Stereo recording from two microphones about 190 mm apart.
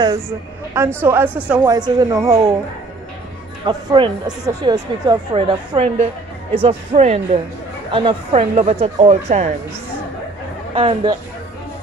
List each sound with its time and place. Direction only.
0.7 s speech: 15° right (ahead or behind)
1.7 s speech: 20° right (ahead or behind)
3.6 s speech: 25° right (ahead or behind)
10.7 s speech: 30° right (ahead or behind)